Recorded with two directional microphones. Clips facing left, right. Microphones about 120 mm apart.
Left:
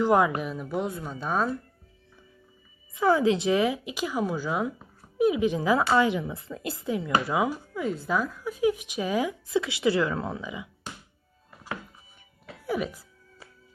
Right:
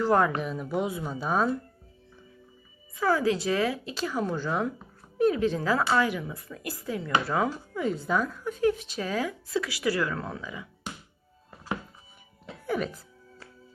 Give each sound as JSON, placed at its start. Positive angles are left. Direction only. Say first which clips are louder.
{"t": 0.0, "sound": "speech", "louder": "left 1 dB", "side_deg": 10}
{"t": 2.9, "sound": "a woman's voice", "louder": "left 3 dB", "side_deg": 20}
{"t": 12.6, "sound": "music", "louder": "even", "side_deg": 5}